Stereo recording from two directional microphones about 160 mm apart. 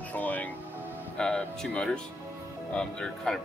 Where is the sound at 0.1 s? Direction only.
10° left (ahead or behind).